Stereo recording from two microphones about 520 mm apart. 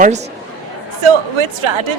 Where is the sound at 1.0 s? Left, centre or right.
Right.